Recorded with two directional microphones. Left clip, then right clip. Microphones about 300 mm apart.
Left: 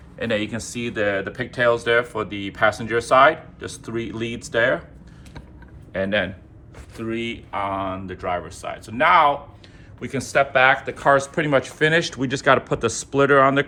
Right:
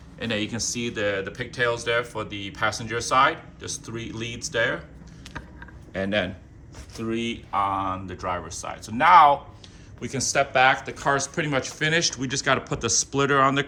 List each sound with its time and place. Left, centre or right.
0.2 s speech: centre
5.9 s speech: centre